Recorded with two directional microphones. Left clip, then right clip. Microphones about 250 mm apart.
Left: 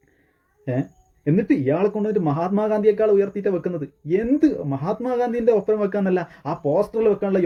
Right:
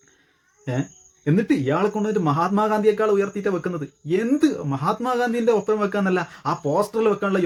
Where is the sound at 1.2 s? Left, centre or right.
Centre.